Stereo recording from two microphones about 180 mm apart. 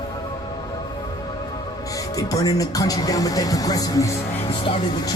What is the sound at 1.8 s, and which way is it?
Speech, 20° left (ahead or behind).